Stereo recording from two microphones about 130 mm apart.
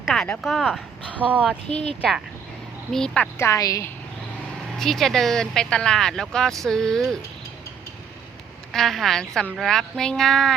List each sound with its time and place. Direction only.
0.0 s speech: centre (ahead or behind)
1.2 s speech: 10° right (ahead or behind)
1.6 s speech: 60° left (ahead or behind)
2.9 s a woman's voice: 5° left (ahead or behind)
3.3 s a woman's voice: 25° left (ahead or behind)
4.8 s a woman's voice: centre (ahead or behind)
8.7 s a woman's voice: centre (ahead or behind)